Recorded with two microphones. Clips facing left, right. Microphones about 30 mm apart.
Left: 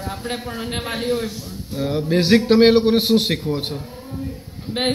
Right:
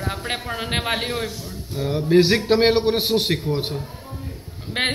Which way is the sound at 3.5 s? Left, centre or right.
Centre.